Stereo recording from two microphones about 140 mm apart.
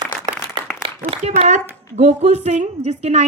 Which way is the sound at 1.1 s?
50° right (ahead or behind).